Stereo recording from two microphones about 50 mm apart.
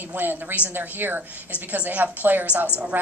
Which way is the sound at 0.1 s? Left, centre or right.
Right.